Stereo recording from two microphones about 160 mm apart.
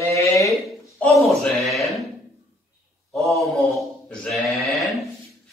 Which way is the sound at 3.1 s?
Centre (ahead or behind).